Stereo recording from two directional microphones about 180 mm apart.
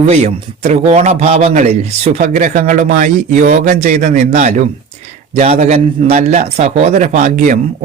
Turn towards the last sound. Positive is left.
turn(degrees=-45)  # may be behind; listen again after turning